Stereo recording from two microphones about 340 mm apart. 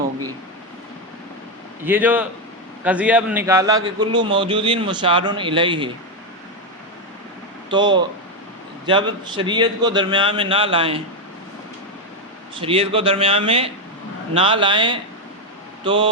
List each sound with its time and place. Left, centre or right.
1.8 s a man's voice: centre
7.7 s a man's voice: centre
12.5 s a man's voice: centre